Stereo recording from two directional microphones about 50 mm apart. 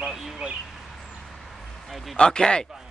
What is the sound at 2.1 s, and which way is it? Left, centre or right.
Speech, centre.